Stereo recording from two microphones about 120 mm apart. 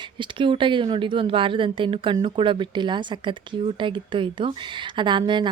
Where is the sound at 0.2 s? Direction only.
45° right (ahead or behind).